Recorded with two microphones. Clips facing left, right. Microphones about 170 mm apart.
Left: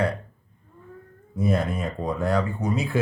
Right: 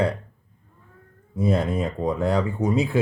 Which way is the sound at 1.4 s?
25° right (ahead or behind).